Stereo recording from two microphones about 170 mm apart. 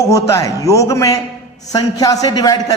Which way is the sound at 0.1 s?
15° left (ahead or behind).